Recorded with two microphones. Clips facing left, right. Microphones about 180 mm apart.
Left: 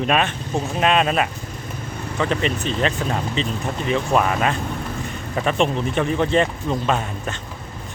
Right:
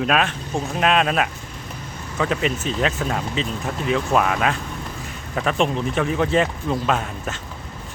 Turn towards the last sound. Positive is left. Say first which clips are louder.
# left 1 dB
turn(degrees=0)  # may be behind; listen again after turning